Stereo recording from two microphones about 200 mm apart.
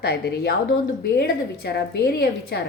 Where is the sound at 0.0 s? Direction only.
55° left (ahead or behind).